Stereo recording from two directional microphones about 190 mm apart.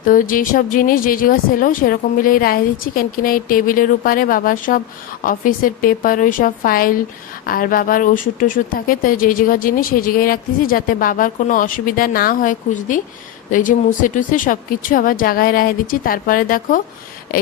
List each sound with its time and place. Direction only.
0.0 s speech: 45° left (ahead or behind)